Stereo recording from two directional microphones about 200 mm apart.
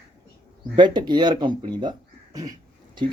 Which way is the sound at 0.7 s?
20° right (ahead or behind).